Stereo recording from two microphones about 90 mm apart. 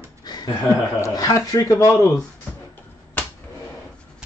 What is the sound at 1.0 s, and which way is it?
Speech, 40° left (ahead or behind).